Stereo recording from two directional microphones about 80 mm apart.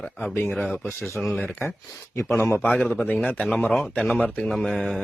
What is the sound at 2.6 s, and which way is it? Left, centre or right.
Speech, centre.